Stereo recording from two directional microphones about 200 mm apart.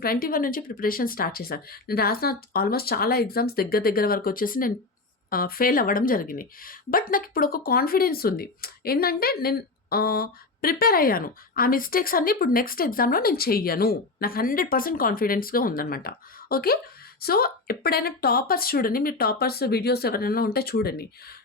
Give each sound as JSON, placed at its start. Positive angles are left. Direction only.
{"t": 0.0, "sound": "speech", "side_deg": 45}